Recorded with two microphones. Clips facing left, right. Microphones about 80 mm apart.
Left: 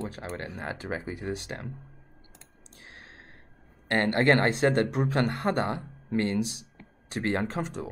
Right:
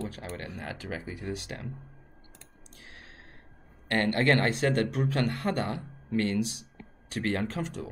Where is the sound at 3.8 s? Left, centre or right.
Left.